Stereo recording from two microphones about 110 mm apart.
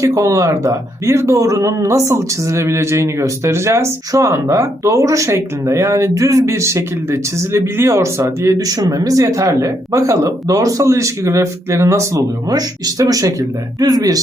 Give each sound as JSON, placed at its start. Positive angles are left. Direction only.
{"t": 0.0, "sound": "speech", "side_deg": -30}